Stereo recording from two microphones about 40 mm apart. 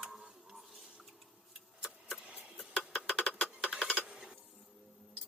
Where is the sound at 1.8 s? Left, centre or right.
Centre.